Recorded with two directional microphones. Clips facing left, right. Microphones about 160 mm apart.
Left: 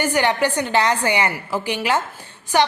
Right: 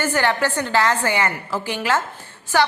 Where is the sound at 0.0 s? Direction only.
15° left (ahead or behind).